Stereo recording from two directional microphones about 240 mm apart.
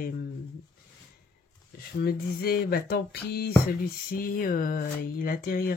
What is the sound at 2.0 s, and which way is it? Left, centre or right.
Speech, left.